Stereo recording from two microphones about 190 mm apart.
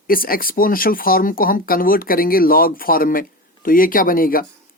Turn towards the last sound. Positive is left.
turn(degrees=50)  # may be behind; listen again after turning